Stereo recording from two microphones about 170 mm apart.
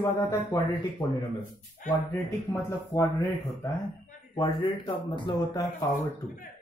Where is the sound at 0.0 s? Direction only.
20° left (ahead or behind).